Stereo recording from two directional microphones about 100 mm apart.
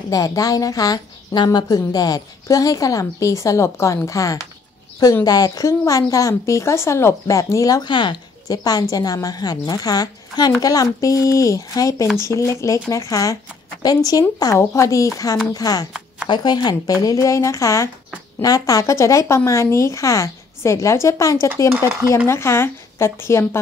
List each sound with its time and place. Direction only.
0.1 s a woman's voice: 35° left (ahead or behind)
7.8 s speech: 50° left (ahead or behind)
8.5 s a woman's voice: 40° left (ahead or behind)